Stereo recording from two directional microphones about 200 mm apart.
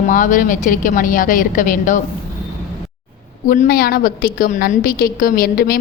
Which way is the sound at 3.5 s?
45° left (ahead or behind).